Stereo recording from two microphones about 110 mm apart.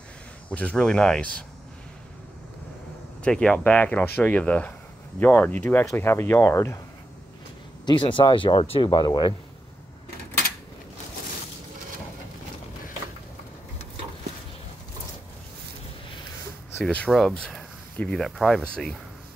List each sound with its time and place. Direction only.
0.5 s speech: 10° left (ahead or behind)
3.3 s speech: 10° left (ahead or behind); by 6.8 s 25° left (ahead or behind)
7.8 s speech: 50° left (ahead or behind)
8.9 s speech: 45° left (ahead or behind)
16.8 s speech: 10° left (ahead or behind)